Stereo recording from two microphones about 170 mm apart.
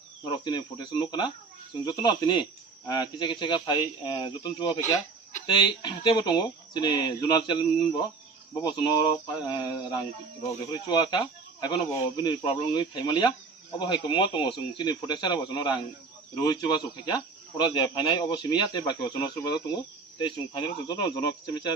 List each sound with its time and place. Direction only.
0.3 s speech: 25° left (ahead or behind)